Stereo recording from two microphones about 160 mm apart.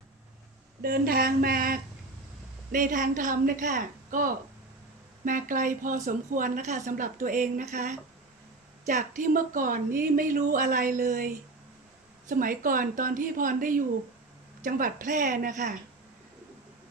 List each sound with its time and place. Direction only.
0.8 s a woman's voice: 65° right (ahead or behind)